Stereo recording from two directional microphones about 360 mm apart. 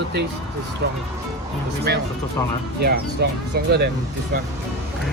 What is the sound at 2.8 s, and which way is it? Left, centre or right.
Speech, right.